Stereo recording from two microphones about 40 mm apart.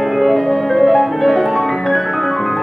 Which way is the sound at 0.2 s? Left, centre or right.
Centre.